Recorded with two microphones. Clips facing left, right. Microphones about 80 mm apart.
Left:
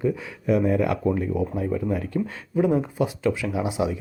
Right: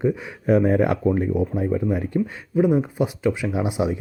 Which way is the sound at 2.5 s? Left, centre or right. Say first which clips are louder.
Right 2 dB; centre.